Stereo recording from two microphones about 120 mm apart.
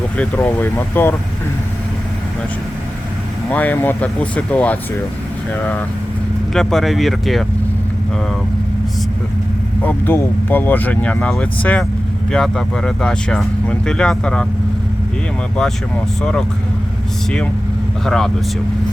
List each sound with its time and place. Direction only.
0.2 s speech: 15° left (ahead or behind)
3.5 s speech: 15° left (ahead or behind)
6.5 s speech: 5° left (ahead or behind)
9.8 s speech: 15° left (ahead or behind)
16.2 s speech: 5° left (ahead or behind)
18.0 s speech: 5° left (ahead or behind)